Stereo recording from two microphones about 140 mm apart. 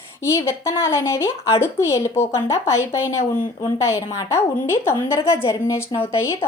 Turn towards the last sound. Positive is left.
turn(degrees=20)  # may be behind; listen again after turning